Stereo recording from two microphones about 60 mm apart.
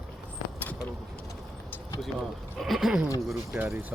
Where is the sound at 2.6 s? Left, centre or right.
Centre.